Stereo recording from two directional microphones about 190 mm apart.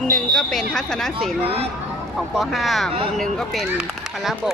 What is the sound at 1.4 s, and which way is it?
Speech, 30° right (ahead or behind).